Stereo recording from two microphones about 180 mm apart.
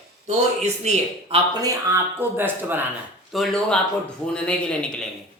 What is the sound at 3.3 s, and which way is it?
A woman's voice, centre (ahead or behind).